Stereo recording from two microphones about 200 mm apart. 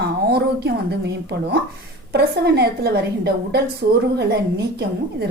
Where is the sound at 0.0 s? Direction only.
55° right (ahead or behind).